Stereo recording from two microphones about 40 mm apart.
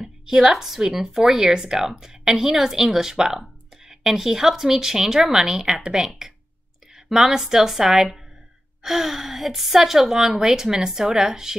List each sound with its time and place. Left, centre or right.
0.5 s a woman's voice: centre